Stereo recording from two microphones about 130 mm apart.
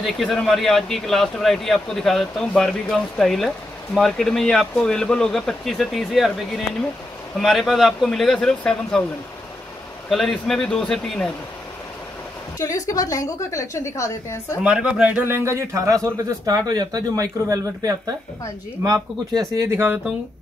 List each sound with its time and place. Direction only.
0.0 s speech: centre (ahead or behind)
10.0 s speech: centre (ahead or behind)
12.5 s a woman's voice: 25° left (ahead or behind)
14.6 s speech: 10° right (ahead or behind)